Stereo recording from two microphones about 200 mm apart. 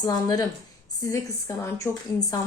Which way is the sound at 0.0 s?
20° left (ahead or behind).